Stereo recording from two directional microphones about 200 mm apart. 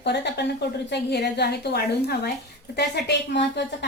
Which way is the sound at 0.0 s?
55° left (ahead or behind).